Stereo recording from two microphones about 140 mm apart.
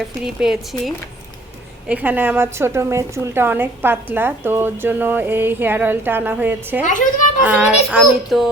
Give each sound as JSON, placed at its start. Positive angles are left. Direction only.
{"t": 0.3, "sound": "a woman's voice", "side_deg": -5}
{"t": 6.8, "sound": "a woman's voice", "side_deg": 65}
{"t": 7.4, "sound": "a woman's voice", "side_deg": -10}